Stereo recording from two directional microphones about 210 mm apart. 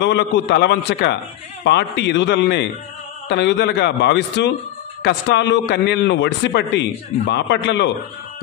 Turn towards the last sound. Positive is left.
turn(degrees=55)  # may be behind; listen again after turning